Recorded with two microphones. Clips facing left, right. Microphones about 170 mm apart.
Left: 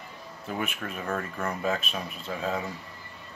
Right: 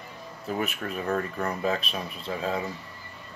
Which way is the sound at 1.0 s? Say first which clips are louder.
Right 3 dB; 30° right (ahead or behind).